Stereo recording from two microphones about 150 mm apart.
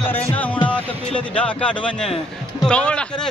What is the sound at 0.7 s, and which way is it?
Speech, 10° left (ahead or behind).